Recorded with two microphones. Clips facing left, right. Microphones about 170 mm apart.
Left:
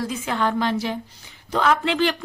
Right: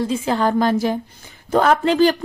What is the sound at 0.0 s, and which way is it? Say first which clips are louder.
Speech: right 5 dB; 30° right (ahead or behind).